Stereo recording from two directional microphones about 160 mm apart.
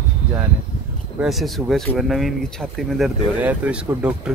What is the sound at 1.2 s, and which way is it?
Speech, centre (ahead or behind).